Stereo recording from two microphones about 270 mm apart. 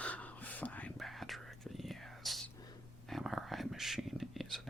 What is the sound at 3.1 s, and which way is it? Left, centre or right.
Whispering, centre.